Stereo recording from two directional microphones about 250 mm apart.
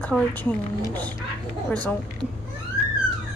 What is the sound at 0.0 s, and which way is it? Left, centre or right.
A woman's voice, centre.